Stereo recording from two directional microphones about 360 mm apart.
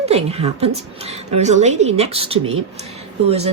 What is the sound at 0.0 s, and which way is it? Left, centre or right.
A woman's voice, centre.